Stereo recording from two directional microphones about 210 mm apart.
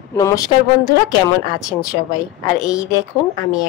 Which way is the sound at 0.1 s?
15° left (ahead or behind).